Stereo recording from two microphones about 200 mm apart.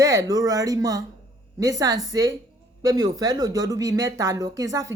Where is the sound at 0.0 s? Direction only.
15° right (ahead or behind).